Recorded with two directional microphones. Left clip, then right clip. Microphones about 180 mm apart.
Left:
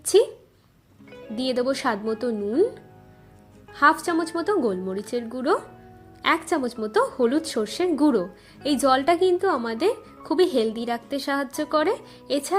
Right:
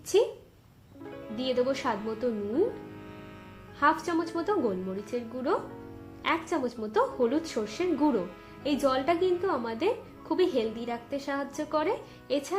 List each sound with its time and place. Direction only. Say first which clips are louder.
1.4 s speech: left 4 dB; 35° left (ahead or behind)
3.8 s speech: left 6 dB; 40° left (ahead or behind)